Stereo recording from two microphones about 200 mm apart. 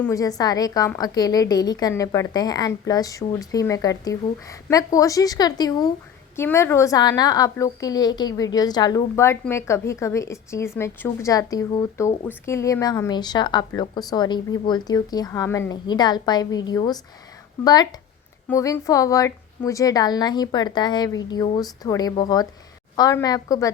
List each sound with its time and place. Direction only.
0.0 s a woman's voice: 15° left (ahead or behind)